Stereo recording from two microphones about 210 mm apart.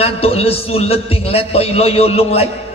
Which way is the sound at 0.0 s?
30° left (ahead or behind).